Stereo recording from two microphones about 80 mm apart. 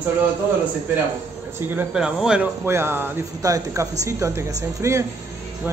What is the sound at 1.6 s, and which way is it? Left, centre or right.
Speech, right.